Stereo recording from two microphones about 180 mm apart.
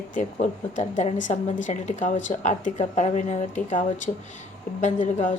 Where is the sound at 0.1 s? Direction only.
45° left (ahead or behind).